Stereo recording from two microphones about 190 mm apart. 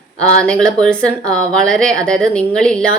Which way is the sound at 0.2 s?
5° left (ahead or behind).